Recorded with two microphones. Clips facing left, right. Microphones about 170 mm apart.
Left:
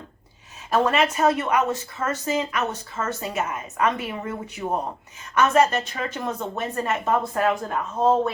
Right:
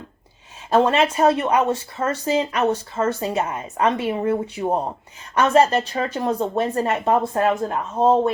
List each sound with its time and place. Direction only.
0.7 s speech: 30° right (ahead or behind)